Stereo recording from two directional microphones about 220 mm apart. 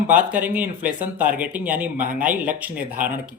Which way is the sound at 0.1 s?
5° right (ahead or behind).